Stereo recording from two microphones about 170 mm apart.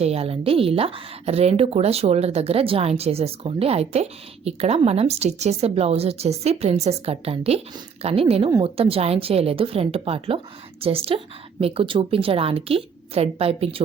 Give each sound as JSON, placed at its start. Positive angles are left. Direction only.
{"t": 0.0, "sound": "a woman's voice", "side_deg": -35}